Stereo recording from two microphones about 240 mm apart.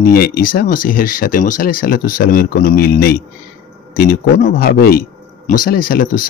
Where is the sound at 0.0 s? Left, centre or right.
Left.